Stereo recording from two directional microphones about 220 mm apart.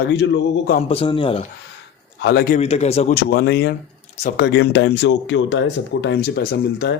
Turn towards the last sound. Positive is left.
turn(degrees=45)  # may be behind; listen again after turning